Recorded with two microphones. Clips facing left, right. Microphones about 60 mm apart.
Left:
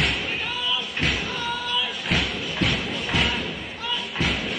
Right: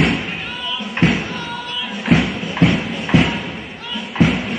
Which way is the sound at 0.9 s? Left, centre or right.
Right.